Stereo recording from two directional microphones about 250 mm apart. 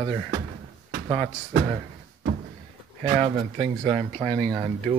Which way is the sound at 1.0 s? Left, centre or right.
Right.